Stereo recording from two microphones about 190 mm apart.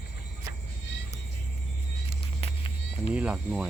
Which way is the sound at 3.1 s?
5° right (ahead or behind).